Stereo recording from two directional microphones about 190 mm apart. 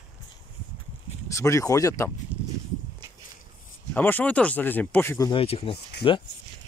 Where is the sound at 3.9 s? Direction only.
10° left (ahead or behind).